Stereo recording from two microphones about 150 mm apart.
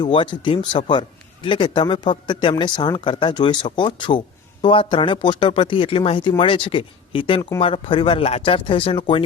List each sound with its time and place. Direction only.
0.0 s speech: 35° left (ahead or behind)